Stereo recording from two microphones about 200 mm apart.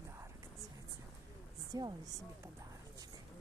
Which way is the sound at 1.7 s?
20° right (ahead or behind).